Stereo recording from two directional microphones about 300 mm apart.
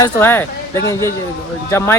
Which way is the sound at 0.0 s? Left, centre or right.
Centre.